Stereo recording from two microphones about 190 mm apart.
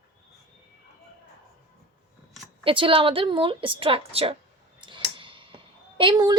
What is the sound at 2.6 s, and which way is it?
A woman's voice, 30° right (ahead or behind).